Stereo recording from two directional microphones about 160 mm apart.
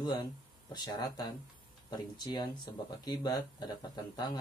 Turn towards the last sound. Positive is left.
turn(degrees=25)  # may be behind; listen again after turning